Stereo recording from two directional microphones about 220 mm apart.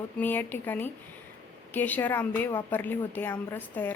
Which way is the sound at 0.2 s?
10° left (ahead or behind).